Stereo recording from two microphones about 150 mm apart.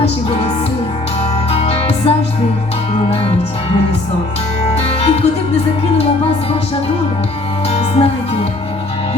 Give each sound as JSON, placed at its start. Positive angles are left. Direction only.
{"t": 0.0, "sound": "music", "side_deg": 40}
{"t": 4.7, "sound": "music", "side_deg": 40}
{"t": 7.8, "sound": "music", "side_deg": 40}